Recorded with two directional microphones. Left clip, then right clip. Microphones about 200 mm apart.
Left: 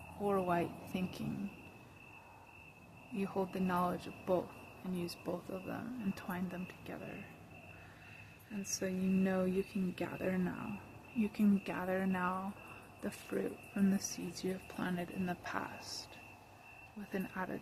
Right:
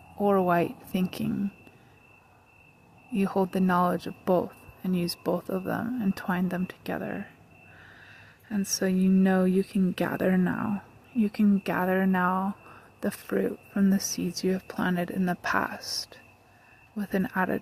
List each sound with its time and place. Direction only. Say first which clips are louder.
0.2 s speech: right 11 dB; 40° right (ahead or behind)
3.2 s speech: right 11 dB; 45° right (ahead or behind)
8.7 s speech: right 11 dB; 50° right (ahead or behind)